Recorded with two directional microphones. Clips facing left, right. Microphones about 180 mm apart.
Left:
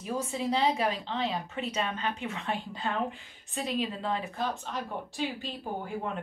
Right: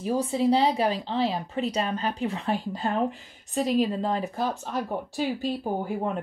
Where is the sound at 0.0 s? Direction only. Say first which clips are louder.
Right 8 dB; 30° right (ahead or behind).